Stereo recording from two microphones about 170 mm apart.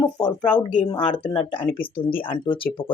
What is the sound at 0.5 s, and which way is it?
Speech, 5° left (ahead or behind).